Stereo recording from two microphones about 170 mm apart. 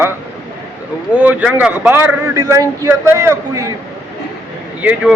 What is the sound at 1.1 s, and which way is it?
Speech, 10° right (ahead or behind).